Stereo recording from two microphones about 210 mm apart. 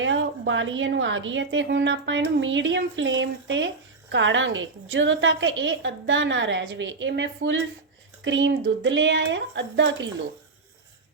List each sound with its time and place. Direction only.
0.0 s a woman's voice: 65° right (ahead or behind)